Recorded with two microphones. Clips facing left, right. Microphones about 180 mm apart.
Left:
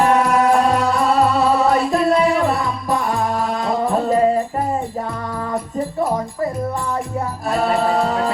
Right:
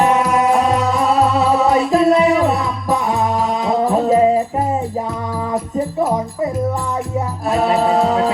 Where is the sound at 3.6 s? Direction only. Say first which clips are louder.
Right 4 dB; centre (ahead or behind).